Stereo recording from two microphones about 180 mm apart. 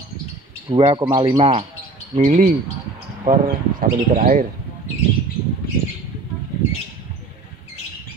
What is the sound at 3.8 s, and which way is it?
Speech, 45° right (ahead or behind).